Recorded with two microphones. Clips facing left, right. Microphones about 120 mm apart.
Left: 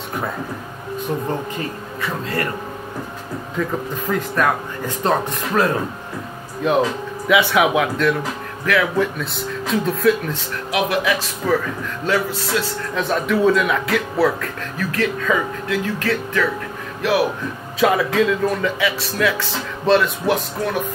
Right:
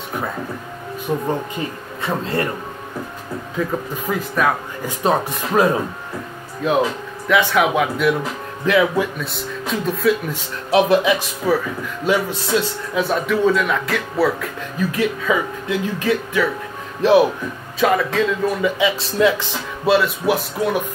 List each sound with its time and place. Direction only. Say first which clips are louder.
2.0 s speech: right 3 dB; 25° right (ahead or behind)
4.1 s speech: even; 10° right (ahead or behind)
9.2 s speech: left 1 dB; centre (ahead or behind)
10.7 s speech: right 5 dB; 25° right (ahead or behind)
11.4 s speech: right 1 dB; 10° right (ahead or behind)
12.3 s speech: right 2 dB; 20° right (ahead or behind)
12.9 s speech: right 1 dB; centre (ahead or behind)
14.8 s speech: right 1 dB; 15° right (ahead or behind)
17.0 s speech: right 5 dB; 25° right (ahead or behind)
17.7 s speech: left 1 dB; centre (ahead or behind)
18.6 s speech: right 2 dB; 20° right (ahead or behind)
19.8 s speech: even; 5° right (ahead or behind)